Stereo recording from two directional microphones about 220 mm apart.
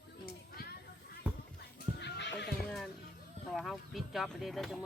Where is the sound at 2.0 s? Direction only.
50° left (ahead or behind).